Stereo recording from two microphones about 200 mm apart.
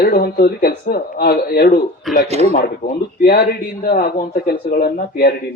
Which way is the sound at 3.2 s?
50° left (ahead or behind).